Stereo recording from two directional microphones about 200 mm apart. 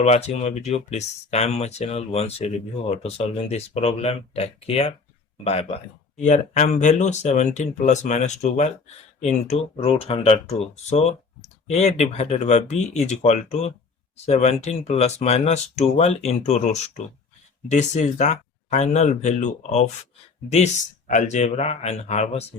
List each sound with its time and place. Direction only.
0.0 s speech: 35° left (ahead or behind)
21.1 s speech: 35° left (ahead or behind)